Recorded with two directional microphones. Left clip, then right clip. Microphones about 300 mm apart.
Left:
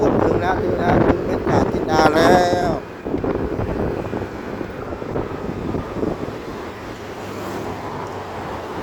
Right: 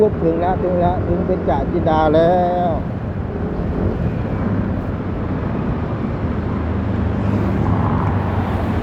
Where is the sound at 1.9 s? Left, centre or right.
Left.